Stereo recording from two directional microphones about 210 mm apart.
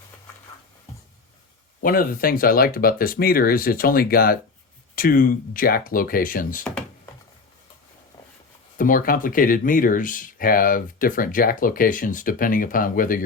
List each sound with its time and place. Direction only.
1.8 s speech: 45° left (ahead or behind)
8.8 s speech: 40° left (ahead or behind)